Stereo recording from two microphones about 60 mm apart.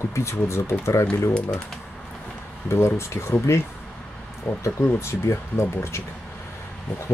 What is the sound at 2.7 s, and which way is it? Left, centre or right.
Speech, left.